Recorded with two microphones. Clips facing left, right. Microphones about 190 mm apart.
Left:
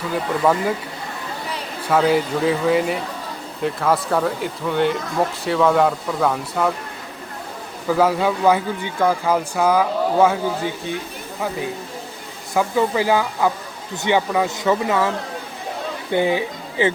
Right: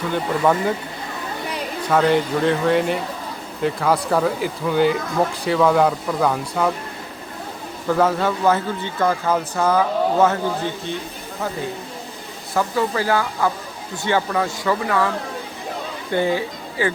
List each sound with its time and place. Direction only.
0.1 s speech: 5° left (ahead or behind)
1.9 s speech: 5° left (ahead or behind)
7.9 s speech: 5° left (ahead or behind)
12.5 s speech: 15° left (ahead or behind)
16.1 s speech: 15° left (ahead or behind)